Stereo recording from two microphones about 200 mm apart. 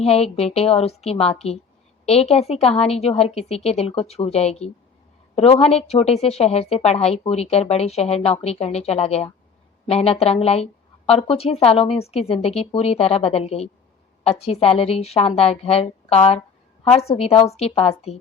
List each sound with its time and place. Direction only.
0.0 s speech: 30° left (ahead or behind)